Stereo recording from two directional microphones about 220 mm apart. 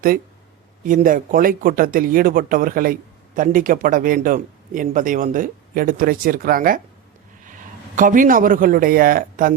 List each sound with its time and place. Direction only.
0.9 s a man's voice: 35° right (ahead or behind)